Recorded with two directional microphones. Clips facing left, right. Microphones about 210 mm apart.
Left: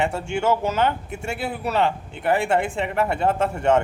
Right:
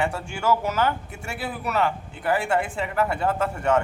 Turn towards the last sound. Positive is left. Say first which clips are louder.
# left 3 dB
turn(degrees=25)  # may be behind; listen again after turning